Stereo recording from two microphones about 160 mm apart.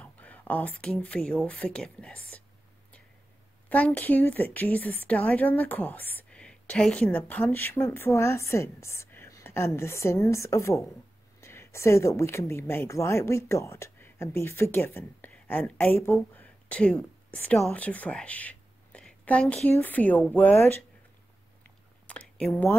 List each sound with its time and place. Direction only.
0.0 s speech: 10° left (ahead or behind)
3.6 s a woman's voice: 10° left (ahead or behind)
22.0 s a sound: 10° left (ahead or behind)